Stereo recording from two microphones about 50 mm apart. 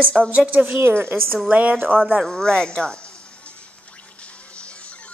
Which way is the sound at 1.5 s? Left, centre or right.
Right.